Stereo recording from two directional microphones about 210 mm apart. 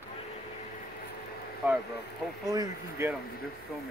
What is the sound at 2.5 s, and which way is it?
Speech, 15° right (ahead or behind).